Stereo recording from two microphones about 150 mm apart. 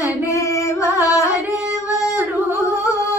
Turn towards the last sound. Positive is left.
turn(degrees=20)  # may be behind; listen again after turning